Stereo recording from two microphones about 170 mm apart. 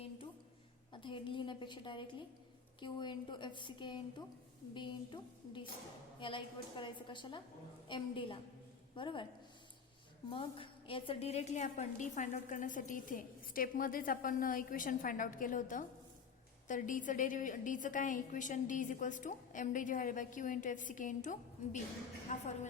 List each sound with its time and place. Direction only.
1.0 s a woman's voice: 30° left (ahead or behind)
10.2 s a woman's voice: 30° left (ahead or behind)